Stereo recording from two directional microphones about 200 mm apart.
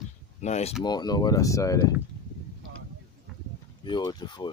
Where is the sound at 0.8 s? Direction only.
20° left (ahead or behind).